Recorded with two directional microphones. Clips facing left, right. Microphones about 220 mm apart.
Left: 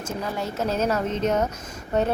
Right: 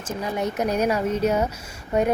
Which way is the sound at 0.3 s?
15° right (ahead or behind).